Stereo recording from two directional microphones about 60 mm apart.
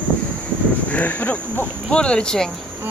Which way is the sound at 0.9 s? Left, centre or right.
Left.